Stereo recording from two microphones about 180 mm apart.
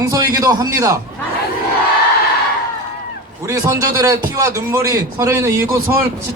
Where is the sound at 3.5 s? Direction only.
15° right (ahead or behind).